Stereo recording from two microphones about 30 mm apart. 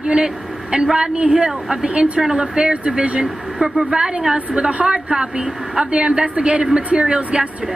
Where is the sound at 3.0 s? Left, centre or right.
Right.